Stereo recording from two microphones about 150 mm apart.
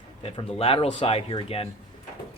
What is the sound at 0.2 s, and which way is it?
Speech, 40° left (ahead or behind).